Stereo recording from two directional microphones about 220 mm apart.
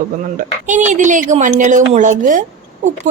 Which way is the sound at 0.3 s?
35° right (ahead or behind).